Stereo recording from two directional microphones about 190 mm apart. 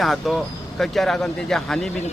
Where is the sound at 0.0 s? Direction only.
Centre (ahead or behind).